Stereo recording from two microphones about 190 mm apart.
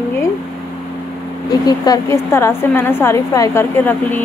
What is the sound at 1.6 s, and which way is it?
A woman's voice, 20° left (ahead or behind).